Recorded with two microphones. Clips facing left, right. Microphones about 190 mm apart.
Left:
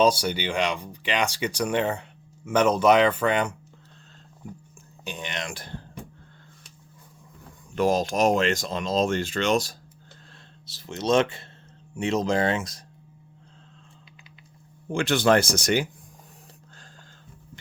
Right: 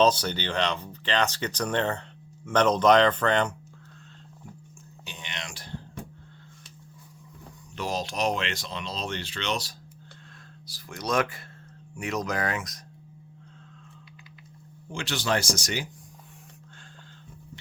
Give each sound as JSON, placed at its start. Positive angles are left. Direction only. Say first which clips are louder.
{"t": 0.0, "sound": "speech", "louder": "left 1 dB", "side_deg": 10}
{"t": 5.0, "sound": "speech", "louder": "left 7 dB", "side_deg": 50}
{"t": 7.8, "sound": "speech", "louder": "left 8 dB", "side_deg": 50}
{"t": 10.7, "sound": "speech", "louder": "left 6 dB", "side_deg": 25}
{"t": 14.8, "sound": "speech", "louder": "left 8 dB", "side_deg": 55}